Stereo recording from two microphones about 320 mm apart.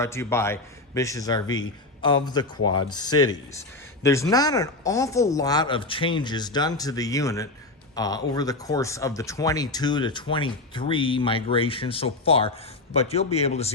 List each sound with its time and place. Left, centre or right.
0.0 s speech: centre